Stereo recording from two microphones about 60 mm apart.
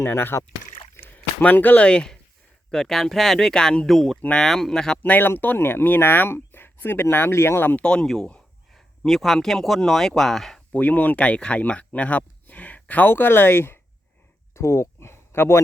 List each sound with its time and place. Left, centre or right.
0.0 s speech: left
0.9 s a sound: left
1.5 s speech: left; by 4.9 s centre
5.0 s speech: left
7.8 s speech: centre
8.0 s speech: centre
10.7 s speech: left
14.5 s a sound: left